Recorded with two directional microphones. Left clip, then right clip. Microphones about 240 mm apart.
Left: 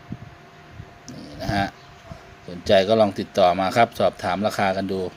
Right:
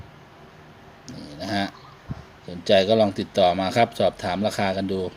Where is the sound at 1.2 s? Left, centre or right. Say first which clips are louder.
Left 2 dB; centre.